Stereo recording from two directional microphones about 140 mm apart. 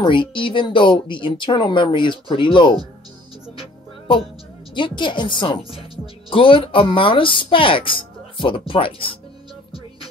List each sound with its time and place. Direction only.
0.0 s speech: 35° left (ahead or behind)
4.7 s speech: 35° left (ahead or behind)